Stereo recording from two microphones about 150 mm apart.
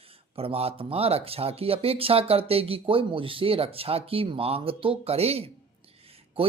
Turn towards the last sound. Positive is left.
turn(degrees=-40)  # may be behind; listen again after turning